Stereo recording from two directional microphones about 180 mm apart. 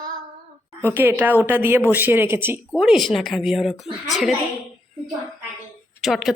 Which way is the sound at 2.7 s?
Centre (ahead or behind).